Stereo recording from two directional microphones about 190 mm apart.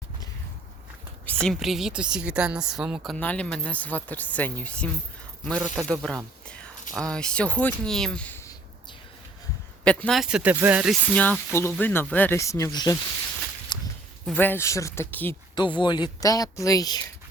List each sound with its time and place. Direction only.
1.5 s speech: centre (ahead or behind)
9.8 s speech: 5° left (ahead or behind)
11.1 s speech: 10° left (ahead or behind)
13.7 s walk: 25° left (ahead or behind)
14.3 s speech: 10° left (ahead or behind)
15.5 s speech: 25° left (ahead or behind)